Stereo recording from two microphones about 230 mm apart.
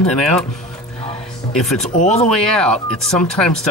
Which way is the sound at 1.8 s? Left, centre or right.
Left.